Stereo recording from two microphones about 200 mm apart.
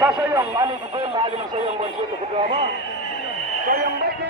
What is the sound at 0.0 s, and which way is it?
Radio, 10° right (ahead or behind).